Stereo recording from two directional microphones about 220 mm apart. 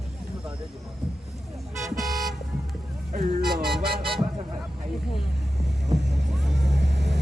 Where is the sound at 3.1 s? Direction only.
35° right (ahead or behind).